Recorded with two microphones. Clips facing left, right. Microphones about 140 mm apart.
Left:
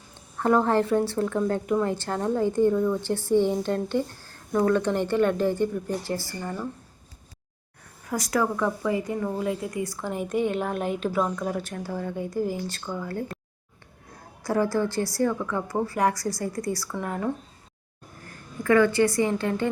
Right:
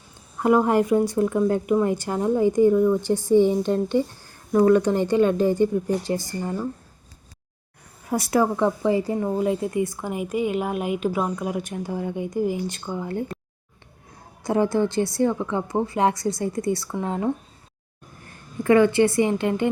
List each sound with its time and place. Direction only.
0.3 s a woman's voice: 10° right (ahead or behind)
8.1 s a woman's voice: 30° right (ahead or behind)
14.4 s speech: 20° right (ahead or behind)
18.6 s speech: 20° right (ahead or behind)